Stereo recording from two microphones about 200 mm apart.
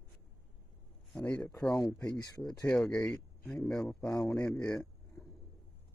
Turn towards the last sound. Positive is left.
turn(degrees=15)  # may be behind; listen again after turning